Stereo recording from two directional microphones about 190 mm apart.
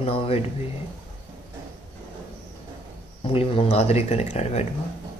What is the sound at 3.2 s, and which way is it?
Speech, 30° left (ahead or behind).